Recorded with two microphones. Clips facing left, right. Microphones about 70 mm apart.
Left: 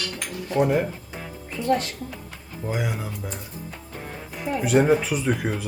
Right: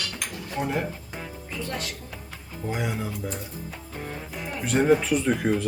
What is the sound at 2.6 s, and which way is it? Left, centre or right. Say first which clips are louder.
Speech: left 1 dB; centre.